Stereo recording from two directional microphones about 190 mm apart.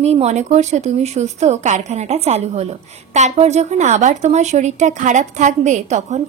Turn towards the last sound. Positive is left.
turn(degrees=-40)  # may be behind; listen again after turning